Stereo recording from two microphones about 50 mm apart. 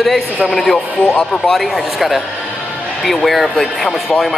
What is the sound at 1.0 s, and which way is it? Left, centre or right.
Speech, centre.